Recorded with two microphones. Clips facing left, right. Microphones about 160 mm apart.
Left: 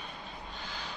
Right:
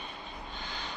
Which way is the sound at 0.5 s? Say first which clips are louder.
Right 2 dB; 5° left (ahead or behind).